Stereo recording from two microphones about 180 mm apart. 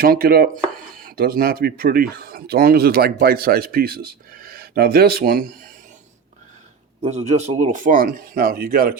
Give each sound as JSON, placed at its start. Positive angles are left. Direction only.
{"t": 0.0, "sound": "speech", "side_deg": -55}
{"t": 7.0, "sound": "speech", "side_deg": -35}